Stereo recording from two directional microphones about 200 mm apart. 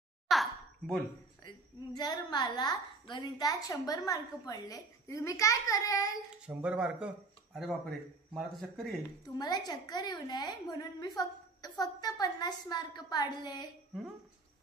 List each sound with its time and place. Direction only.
0.3 s a sound: centre (ahead or behind)
2.0 s a woman's voice: 20° left (ahead or behind)
6.3 s speech: 5° right (ahead or behind)
9.4 s a woman's voice: 20° left (ahead or behind)